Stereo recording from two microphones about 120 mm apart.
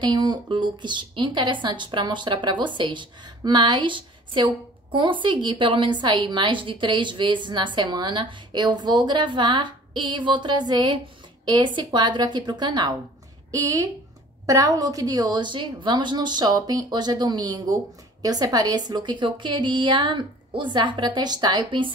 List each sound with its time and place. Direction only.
0.0 s a woman's voice: 35° right (ahead or behind)